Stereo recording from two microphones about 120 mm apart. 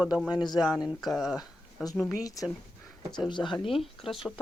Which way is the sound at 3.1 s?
40° left (ahead or behind).